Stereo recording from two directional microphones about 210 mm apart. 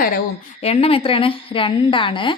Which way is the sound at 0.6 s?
30° left (ahead or behind).